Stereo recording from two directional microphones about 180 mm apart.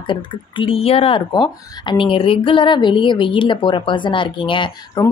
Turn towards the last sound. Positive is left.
turn(degrees=25)  # may be behind; listen again after turning